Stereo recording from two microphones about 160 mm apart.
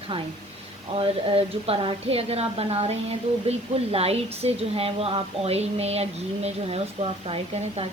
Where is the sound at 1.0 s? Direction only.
35° right (ahead or behind).